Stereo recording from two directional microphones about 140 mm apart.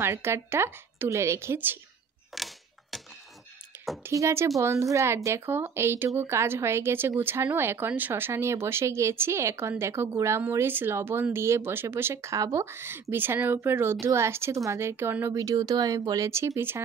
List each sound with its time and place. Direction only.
0.0 s a woman's voice: 20° right (ahead or behind)
2.3 s a sound: centre (ahead or behind)
4.0 s a woman's voice: 20° right (ahead or behind)